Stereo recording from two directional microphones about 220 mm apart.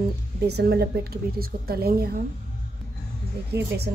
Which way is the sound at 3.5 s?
50° right (ahead or behind).